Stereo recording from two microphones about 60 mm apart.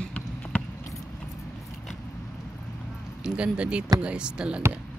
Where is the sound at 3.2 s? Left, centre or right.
Centre.